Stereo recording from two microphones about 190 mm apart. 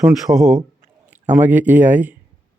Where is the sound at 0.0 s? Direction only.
Centre (ahead or behind).